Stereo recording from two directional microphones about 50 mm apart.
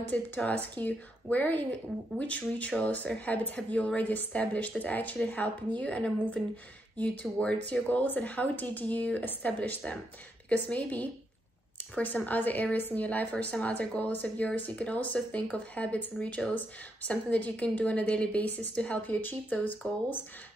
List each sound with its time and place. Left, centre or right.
0.1 s a woman's voice: left